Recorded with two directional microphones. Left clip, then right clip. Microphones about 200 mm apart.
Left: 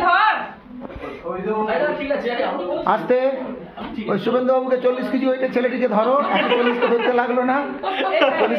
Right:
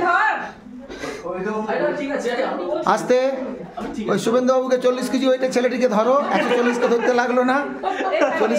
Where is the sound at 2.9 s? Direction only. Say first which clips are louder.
Even; 15° right (ahead or behind).